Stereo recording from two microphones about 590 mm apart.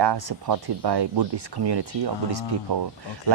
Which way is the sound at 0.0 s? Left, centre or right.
Right.